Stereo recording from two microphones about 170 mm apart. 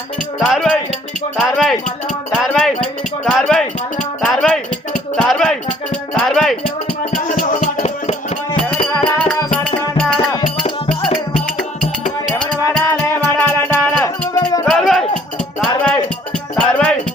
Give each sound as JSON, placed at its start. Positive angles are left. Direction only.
{"t": 0.4, "sound": "speech", "side_deg": 5}
{"t": 2.3, "sound": "a sound", "side_deg": 5}
{"t": 4.2, "sound": "music", "side_deg": 5}
{"t": 7.6, "sound": "music", "side_deg": 45}
{"t": 9.8, "sound": "music", "side_deg": 5}
{"t": 10.3, "sound": "music", "side_deg": 30}
{"t": 12.9, "sound": "music", "side_deg": 10}
{"t": 14.7, "sound": "music", "side_deg": 0}